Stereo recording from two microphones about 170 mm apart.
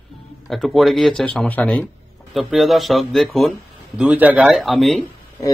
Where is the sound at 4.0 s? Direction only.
10° right (ahead or behind).